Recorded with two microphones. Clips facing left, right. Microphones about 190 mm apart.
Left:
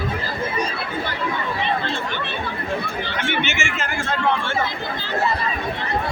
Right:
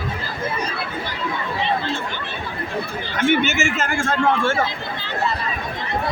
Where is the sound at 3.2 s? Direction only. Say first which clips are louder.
Right 8 dB; 45° right (ahead or behind).